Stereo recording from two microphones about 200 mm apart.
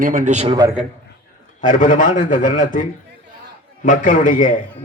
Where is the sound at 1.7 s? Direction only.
40° left (ahead or behind).